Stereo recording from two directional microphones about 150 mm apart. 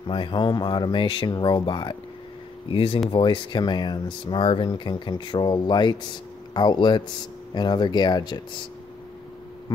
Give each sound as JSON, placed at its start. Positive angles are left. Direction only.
{"t": 0.0, "sound": "speech", "side_deg": 30}